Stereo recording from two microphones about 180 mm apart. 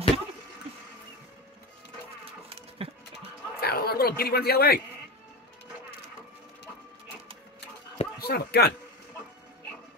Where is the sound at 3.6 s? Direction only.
60° left (ahead or behind).